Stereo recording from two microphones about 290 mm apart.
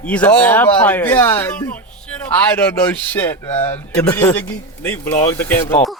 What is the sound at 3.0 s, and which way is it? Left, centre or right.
A man's voice, centre.